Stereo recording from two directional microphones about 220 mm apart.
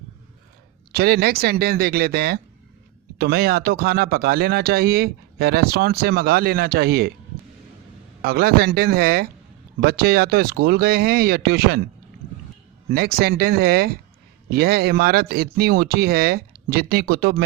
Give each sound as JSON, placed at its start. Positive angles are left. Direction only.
{"t": 0.9, "sound": "speech", "side_deg": -45}
{"t": 8.2, "sound": "speech", "side_deg": -45}
{"t": 12.9, "sound": "speech", "side_deg": -45}